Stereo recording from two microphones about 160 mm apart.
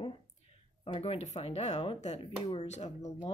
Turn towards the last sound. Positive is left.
turn(degrees=45)  # may be behind; listen again after turning